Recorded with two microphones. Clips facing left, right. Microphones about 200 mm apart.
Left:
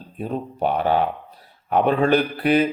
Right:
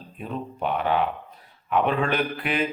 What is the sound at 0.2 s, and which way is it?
Speech, 40° left (ahead or behind).